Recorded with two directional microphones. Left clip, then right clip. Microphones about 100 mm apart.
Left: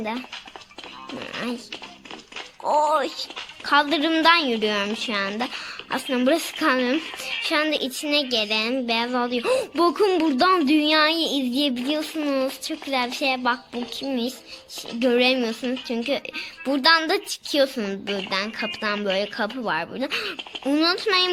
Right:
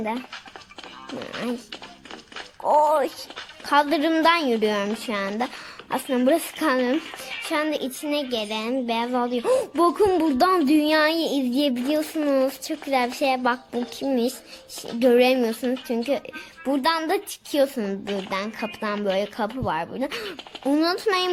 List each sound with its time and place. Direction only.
1.2 s speech: 45° right (ahead or behind)
2.7 s speech: 50° right (ahead or behind)
6.9 s music: 5° left (ahead or behind)
7.5 s a child's voice: 35° right (ahead or behind)
9.9 s music: 45° right (ahead or behind); by 13.6 s 90° right
15.0 s speech: 65° right (ahead or behind)